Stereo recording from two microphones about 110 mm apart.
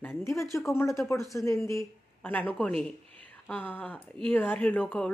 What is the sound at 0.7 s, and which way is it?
Speech, 25° left (ahead or behind).